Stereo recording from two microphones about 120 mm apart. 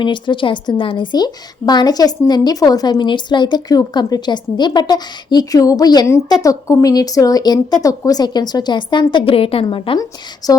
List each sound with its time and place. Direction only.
0.0 s a woman's voice: 40° left (ahead or behind)
9.1 s a woman's voice: 50° left (ahead or behind)
10.0 s a woman's voice: 30° left (ahead or behind)